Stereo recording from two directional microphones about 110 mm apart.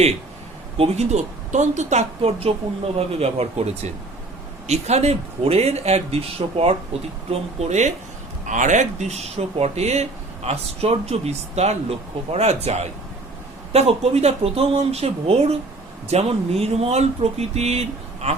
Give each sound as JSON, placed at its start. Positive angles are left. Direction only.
{"t": 0.8, "sound": "speech", "side_deg": -85}
{"t": 7.3, "sound": "speech", "side_deg": -85}
{"t": 13.7, "sound": "speech", "side_deg": -65}